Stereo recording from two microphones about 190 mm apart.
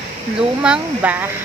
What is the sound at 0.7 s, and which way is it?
Speech, 10° right (ahead or behind).